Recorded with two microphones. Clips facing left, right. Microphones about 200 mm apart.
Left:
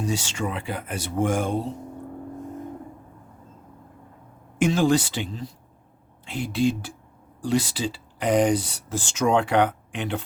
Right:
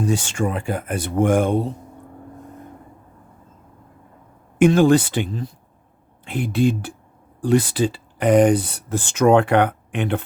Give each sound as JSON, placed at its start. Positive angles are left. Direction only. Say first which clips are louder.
{"t": 0.0, "sound": "speech", "louder": "right 6 dB", "side_deg": -55}
{"t": 4.5, "sound": "speech", "louder": "right 6 dB", "side_deg": -55}